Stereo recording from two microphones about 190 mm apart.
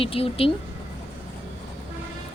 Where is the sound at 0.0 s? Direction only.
30° left (ahead or behind).